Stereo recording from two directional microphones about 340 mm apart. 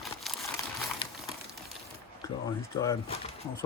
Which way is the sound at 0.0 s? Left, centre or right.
Centre.